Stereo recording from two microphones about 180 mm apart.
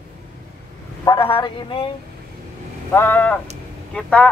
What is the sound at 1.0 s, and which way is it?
Speech, 30° left (ahead or behind).